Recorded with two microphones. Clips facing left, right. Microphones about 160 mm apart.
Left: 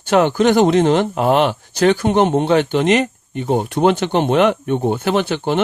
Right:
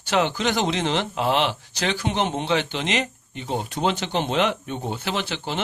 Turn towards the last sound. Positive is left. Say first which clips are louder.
# left 10 dB
turn(degrees=55)  # may be behind; listen again after turning